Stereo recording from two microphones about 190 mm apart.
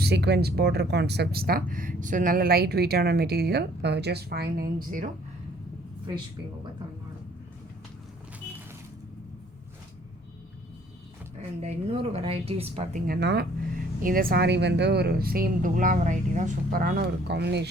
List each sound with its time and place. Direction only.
0.0 s speech: 60° right (ahead or behind)
11.6 s a woman's voice: 30° right (ahead or behind)
13.1 s speech: 60° right (ahead or behind)
14.0 s a woman's voice: 50° right (ahead or behind)